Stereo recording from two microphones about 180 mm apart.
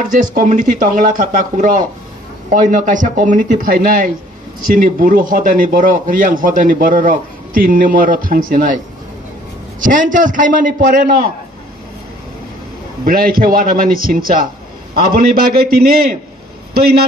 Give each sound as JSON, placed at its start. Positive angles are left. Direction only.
{"t": 0.0, "sound": "speech", "side_deg": -45}
{"t": 13.0, "sound": "a man's voice", "side_deg": -55}